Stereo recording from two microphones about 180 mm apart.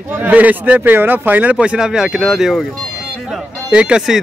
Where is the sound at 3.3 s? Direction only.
5° right (ahead or behind).